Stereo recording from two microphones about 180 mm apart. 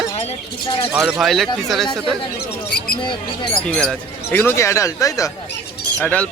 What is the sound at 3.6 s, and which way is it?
Speech, 5° left (ahead or behind).